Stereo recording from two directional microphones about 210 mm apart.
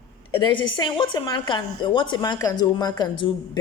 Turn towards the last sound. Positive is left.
turn(degrees=20)  # may be behind; listen again after turning